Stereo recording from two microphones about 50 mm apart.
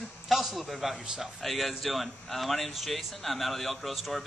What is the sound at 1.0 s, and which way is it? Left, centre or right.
Speech, centre.